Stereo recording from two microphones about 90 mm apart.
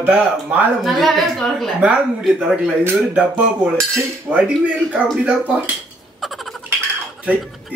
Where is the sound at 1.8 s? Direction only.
10° right (ahead or behind).